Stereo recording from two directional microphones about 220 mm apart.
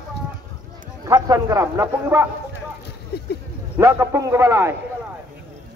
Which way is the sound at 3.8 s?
15° right (ahead or behind).